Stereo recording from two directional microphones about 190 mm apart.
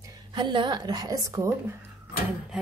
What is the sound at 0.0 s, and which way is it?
A woman's voice, 25° right (ahead or behind).